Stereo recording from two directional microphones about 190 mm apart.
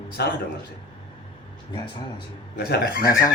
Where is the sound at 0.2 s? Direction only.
55° left (ahead or behind).